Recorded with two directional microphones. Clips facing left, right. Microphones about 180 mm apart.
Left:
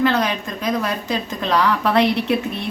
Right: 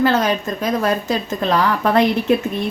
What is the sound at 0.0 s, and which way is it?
A woman's voice, 45° right (ahead or behind).